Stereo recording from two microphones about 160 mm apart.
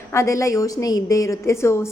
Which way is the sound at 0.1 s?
20° left (ahead or behind).